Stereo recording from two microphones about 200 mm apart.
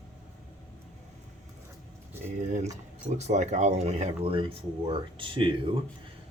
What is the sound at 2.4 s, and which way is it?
Speech, 35° right (ahead or behind).